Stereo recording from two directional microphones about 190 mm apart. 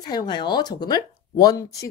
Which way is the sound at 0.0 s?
20° left (ahead or behind).